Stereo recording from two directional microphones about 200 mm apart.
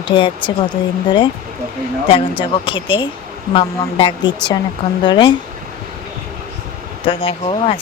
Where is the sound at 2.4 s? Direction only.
25° left (ahead or behind).